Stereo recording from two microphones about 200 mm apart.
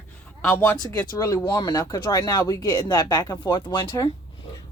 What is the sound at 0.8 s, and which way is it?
A woman's voice, 20° left (ahead or behind).